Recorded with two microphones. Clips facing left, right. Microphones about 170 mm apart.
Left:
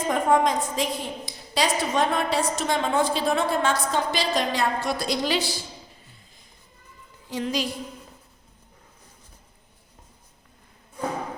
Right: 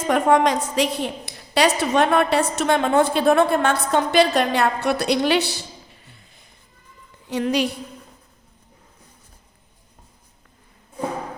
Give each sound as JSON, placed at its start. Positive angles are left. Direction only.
{"t": 0.1, "sound": "a woman's voice", "side_deg": -75}
{"t": 7.3, "sound": "a woman's voice", "side_deg": -65}